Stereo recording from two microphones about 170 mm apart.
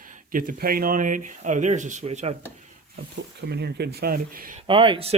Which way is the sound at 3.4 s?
75° right (ahead or behind).